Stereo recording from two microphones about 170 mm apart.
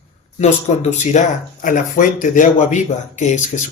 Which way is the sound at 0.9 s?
45° left (ahead or behind).